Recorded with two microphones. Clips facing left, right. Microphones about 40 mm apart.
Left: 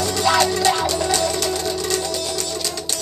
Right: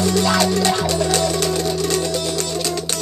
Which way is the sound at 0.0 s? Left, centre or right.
Centre.